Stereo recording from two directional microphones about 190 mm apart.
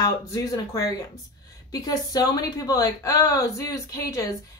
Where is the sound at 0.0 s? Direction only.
15° left (ahead or behind).